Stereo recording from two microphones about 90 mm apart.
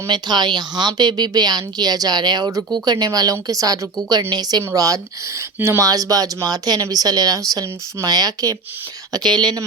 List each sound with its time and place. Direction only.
0.1 s speech: 55° right (ahead or behind)
4.2 s speech: 50° right (ahead or behind)
5.5 s speech: 30° right (ahead or behind)
5.9 s speech: 45° right (ahead or behind)
9.1 s speech: 55° right (ahead or behind)